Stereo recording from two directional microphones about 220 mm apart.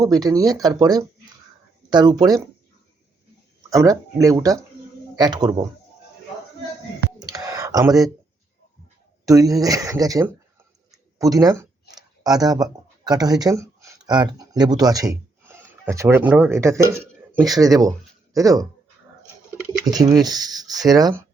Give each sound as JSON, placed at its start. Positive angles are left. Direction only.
{"t": 0.0, "sound": "speech", "side_deg": -15}
{"t": 3.7, "sound": "speech", "side_deg": -15}
{"t": 7.2, "sound": "a sound", "side_deg": -15}
{"t": 9.2, "sound": "speech", "side_deg": -15}
{"t": 17.6, "sound": "speech", "side_deg": -15}
{"t": 19.8, "sound": "speech", "side_deg": -15}